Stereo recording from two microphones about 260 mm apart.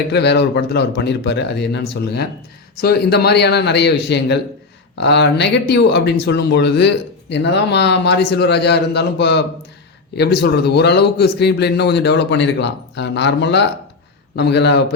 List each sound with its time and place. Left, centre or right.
0.1 s speech: left